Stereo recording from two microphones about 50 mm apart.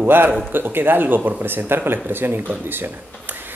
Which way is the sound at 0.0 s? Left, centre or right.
Right.